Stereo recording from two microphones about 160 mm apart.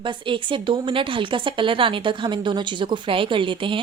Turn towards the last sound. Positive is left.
turn(degrees=-30)  # may be behind; listen again after turning